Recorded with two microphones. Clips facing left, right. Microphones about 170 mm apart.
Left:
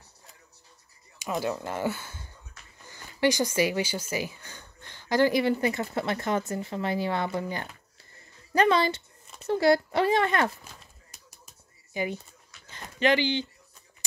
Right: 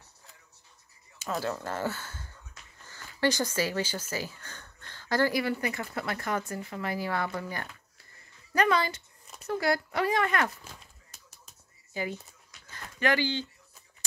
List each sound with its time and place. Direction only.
1.2 s speech: 15° left (ahead or behind)
11.1 s a sound: 10° left (ahead or behind)
12.6 s speech: 20° left (ahead or behind)